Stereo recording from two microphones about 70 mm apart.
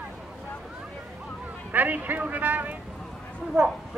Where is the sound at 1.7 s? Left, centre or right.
Right.